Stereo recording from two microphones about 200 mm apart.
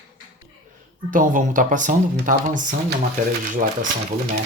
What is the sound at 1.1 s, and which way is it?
Speech, 40° right (ahead or behind).